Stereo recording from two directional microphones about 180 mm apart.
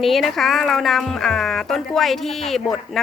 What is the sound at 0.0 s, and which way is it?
Speech, centre (ahead or behind).